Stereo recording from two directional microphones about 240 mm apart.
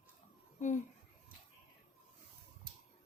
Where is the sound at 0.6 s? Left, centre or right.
Left.